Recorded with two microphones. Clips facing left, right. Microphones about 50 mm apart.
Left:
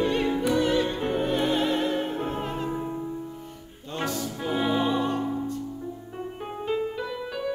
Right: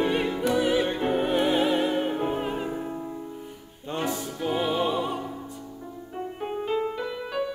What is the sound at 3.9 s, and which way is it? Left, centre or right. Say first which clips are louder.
Music: right 1 dB; centre.